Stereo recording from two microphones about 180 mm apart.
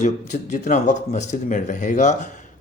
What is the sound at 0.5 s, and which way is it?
Speech, 45° left (ahead or behind).